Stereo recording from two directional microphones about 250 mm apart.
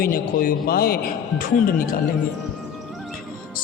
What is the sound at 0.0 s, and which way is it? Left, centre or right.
A man's voice, left.